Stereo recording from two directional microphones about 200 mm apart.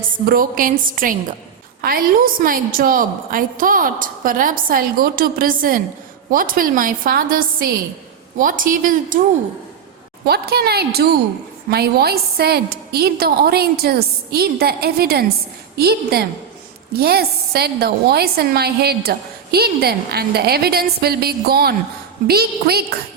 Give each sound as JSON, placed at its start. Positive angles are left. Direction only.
{"t": 0.3, "sound": "a woman's voice", "side_deg": -45}
{"t": 10.2, "sound": "a woman's voice", "side_deg": -50}